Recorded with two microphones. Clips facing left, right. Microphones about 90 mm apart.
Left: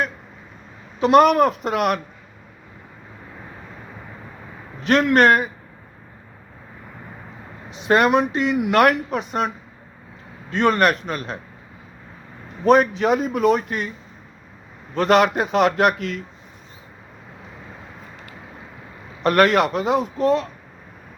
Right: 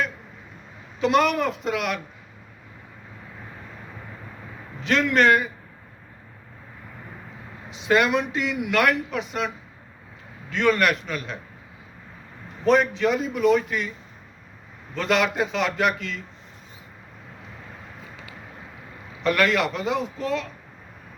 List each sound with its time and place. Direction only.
0.9 s a man's voice: 50° left (ahead or behind)
4.8 s a man's voice: 50° left (ahead or behind)
7.9 s a man's voice: 45° left (ahead or behind)
10.5 s a man's voice: 40° left (ahead or behind)
12.6 s a man's voice: 50° left (ahead or behind)
14.9 s a man's voice: 50° left (ahead or behind)
19.2 s a man's voice: 50° left (ahead or behind)